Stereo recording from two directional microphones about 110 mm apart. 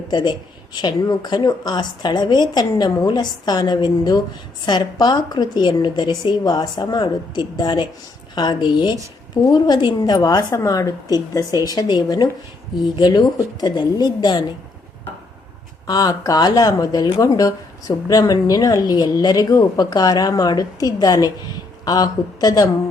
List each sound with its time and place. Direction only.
0.1 s speech: 40° left (ahead or behind)
15.9 s speech: 35° left (ahead or behind)